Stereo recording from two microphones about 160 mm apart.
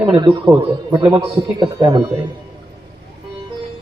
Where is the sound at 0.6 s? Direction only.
35° right (ahead or behind).